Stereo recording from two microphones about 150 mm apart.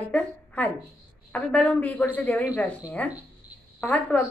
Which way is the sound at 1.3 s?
10° left (ahead or behind).